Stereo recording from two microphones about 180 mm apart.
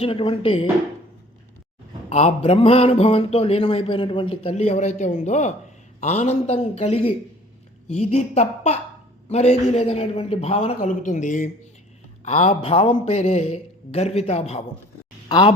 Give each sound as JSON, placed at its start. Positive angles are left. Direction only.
{"t": 0.0, "sound": "speech", "side_deg": 30}
{"t": 2.0, "sound": "speech", "side_deg": 35}
{"t": 15.3, "sound": "speech", "side_deg": 25}